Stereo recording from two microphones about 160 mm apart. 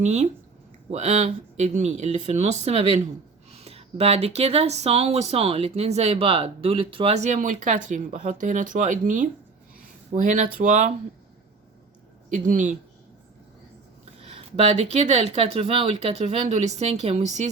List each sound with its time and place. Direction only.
0.0 s speech: 45° right (ahead or behind)
12.3 s speech: 55° right (ahead or behind)
14.2 s speech: 40° right (ahead or behind)